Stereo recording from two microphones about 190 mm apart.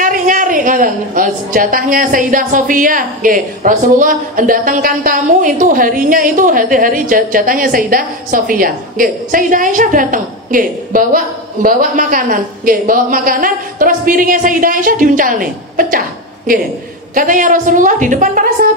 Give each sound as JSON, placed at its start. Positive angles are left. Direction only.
{"t": 0.0, "sound": "a woman's voice", "side_deg": -45}
{"t": 17.1, "sound": "a woman's voice", "side_deg": -45}